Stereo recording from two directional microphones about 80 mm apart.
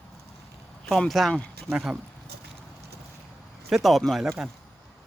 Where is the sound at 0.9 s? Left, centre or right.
Centre.